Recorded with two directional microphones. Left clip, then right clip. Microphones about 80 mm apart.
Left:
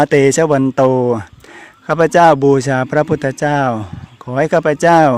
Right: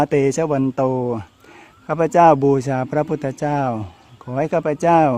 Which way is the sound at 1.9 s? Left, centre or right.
Left.